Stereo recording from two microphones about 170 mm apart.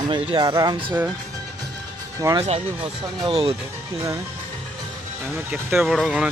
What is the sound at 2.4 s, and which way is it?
Speech, 35° right (ahead or behind).